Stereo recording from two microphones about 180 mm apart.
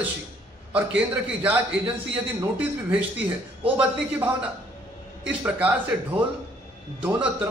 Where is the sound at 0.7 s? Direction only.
10° right (ahead or behind).